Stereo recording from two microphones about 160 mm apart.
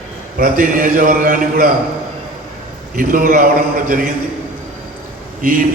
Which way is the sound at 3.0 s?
60° right (ahead or behind).